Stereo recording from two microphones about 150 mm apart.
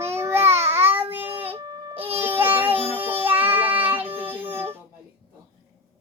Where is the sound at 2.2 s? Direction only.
15° right (ahead or behind).